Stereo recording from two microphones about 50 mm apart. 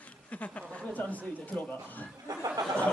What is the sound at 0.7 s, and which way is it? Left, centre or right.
A man's voice, left.